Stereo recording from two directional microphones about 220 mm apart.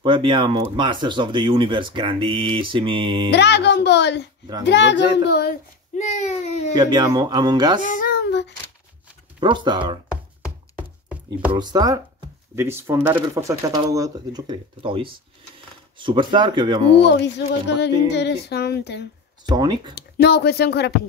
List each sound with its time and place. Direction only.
0.0 s speech: 20° right (ahead or behind)
3.3 s speech: 50° left (ahead or behind); by 6.7 s 30° left (ahead or behind)
6.8 s speech: 20° right (ahead or behind)
7.8 s speech: 40° left (ahead or behind)
9.4 s speech: 20° right (ahead or behind)
11.5 s speech: 20° right (ahead or behind)
17.0 s speech: 50° left (ahead or behind)
19.5 s speech: 20° right (ahead or behind)
20.0 s speech: 45° left (ahead or behind)